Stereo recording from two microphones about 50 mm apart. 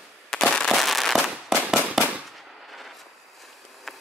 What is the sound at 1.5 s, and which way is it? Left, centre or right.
Firecracker, centre.